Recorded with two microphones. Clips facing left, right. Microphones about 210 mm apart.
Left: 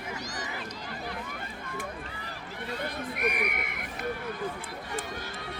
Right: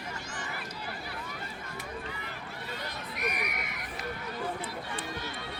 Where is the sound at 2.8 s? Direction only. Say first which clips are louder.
Left 6 dB; 55° left (ahead or behind).